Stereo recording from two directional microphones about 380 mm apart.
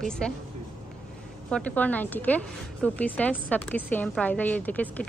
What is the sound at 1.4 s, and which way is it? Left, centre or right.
Speech, centre.